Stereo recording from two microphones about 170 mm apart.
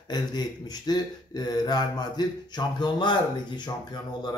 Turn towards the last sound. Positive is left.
turn(degrees=25)  # may be behind; listen again after turning